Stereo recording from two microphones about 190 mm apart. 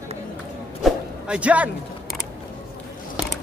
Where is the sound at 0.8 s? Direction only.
5° right (ahead or behind).